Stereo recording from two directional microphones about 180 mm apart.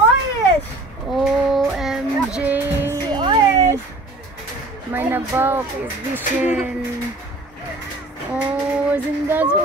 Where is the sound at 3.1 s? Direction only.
20° right (ahead or behind).